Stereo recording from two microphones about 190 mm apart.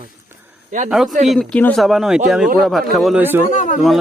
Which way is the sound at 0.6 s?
40° right (ahead or behind).